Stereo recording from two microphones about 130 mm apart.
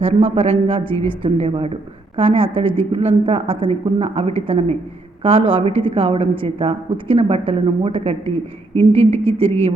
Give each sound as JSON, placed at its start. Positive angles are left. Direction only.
{"t": 0.0, "sound": "speech", "side_deg": -50}